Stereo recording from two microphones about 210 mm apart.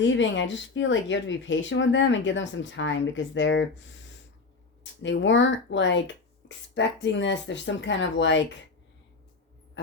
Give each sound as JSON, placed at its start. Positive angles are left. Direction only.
{"t": 0.0, "sound": "speech", "side_deg": 60}